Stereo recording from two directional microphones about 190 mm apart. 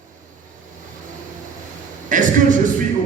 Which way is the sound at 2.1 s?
45° right (ahead or behind).